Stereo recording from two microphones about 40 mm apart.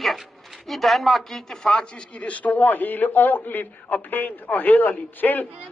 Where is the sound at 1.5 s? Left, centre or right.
Centre.